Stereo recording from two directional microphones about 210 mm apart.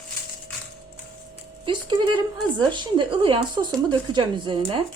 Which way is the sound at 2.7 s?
25° right (ahead or behind).